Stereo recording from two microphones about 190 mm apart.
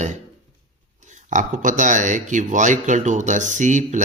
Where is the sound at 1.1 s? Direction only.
40° right (ahead or behind).